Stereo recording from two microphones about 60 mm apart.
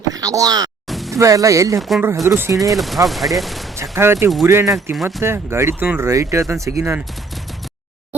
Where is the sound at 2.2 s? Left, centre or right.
Right.